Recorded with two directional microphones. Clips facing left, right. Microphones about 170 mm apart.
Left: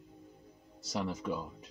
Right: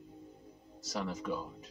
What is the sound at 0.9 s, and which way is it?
Speech, 15° left (ahead or behind).